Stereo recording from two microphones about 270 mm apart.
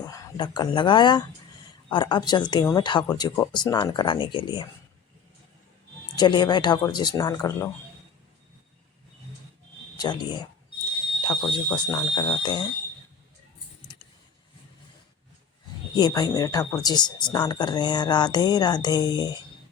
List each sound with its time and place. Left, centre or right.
0.1 s a woman's voice: centre
6.1 s a woman's voice: centre
10.0 s a woman's voice: centre
11.2 s smoke detector: centre
11.5 s a woman's voice: centre
16.0 s a woman's voice: centre